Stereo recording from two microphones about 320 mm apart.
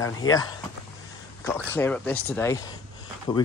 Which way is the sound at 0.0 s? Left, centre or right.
Centre.